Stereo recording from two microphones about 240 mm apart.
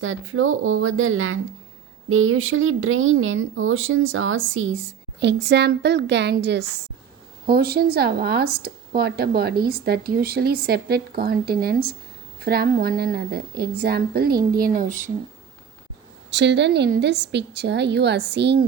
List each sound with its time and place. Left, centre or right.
0.0 s a woman's voice: right
16.3 s a woman's voice: right